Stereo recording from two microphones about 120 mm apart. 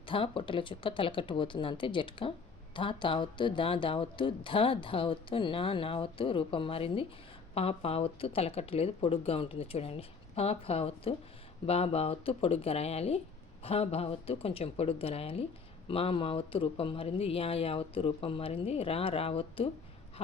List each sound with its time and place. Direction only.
0.0 s speech: 45° left (ahead or behind)